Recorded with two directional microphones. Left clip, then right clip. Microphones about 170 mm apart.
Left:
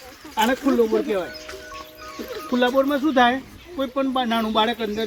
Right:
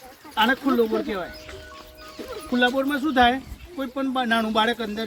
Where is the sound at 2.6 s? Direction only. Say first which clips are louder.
Left 4 dB; 20° right (ahead or behind).